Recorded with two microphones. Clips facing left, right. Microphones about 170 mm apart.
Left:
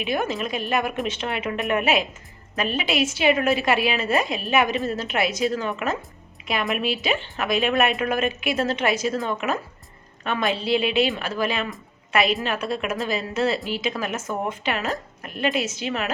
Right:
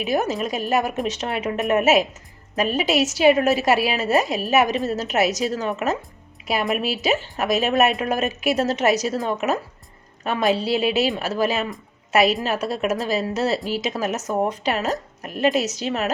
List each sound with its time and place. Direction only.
0.0 s a woman's voice: 40° right (ahead or behind)
6.8 s a woman's voice: 40° right (ahead or behind)